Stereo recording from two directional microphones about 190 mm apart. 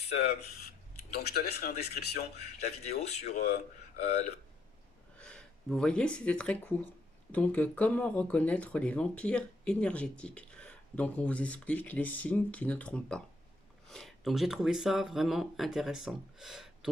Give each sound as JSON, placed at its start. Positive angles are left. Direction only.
{"t": 0.0, "sound": "speech", "side_deg": 35}
{"t": 1.1, "sound": "speech", "side_deg": 55}
{"t": 2.6, "sound": "speech", "side_deg": 35}
{"t": 5.1, "sound": "speech", "side_deg": 5}